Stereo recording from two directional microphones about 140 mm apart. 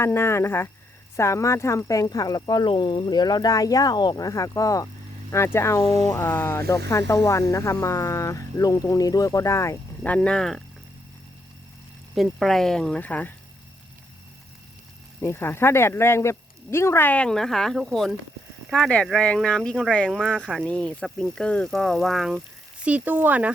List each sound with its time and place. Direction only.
0.0 s speech: 20° left (ahead or behind)
12.1 s speech: centre (ahead or behind)
15.2 s speech: 15° left (ahead or behind); by 23.5 s 10° right (ahead or behind)